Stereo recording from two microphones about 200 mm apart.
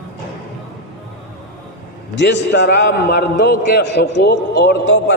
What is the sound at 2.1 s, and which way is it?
A man's voice, 60° left (ahead or behind).